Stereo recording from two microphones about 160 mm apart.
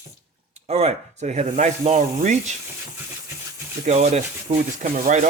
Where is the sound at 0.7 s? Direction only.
40° right (ahead or behind).